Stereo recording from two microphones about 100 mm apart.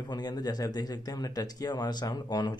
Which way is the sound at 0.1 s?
45° left (ahead or behind).